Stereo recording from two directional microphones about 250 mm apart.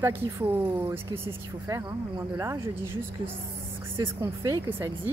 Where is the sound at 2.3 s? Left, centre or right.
Centre.